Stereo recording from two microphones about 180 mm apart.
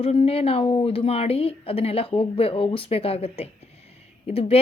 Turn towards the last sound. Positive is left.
turn(degrees=35)  # may be behind; listen again after turning